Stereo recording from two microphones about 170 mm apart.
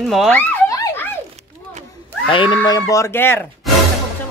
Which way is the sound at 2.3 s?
30° left (ahead or behind).